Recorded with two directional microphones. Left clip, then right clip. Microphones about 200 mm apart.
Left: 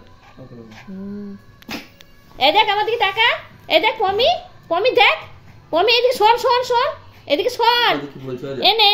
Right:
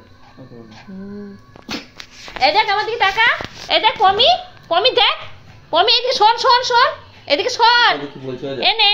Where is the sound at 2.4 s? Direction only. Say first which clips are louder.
Even; 35° left (ahead or behind).